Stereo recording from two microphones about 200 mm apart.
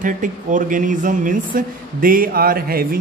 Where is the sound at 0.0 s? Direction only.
40° right (ahead or behind).